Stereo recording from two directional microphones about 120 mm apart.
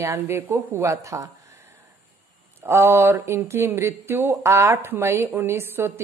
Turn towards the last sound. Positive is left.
turn(degrees=-20)  # may be behind; listen again after turning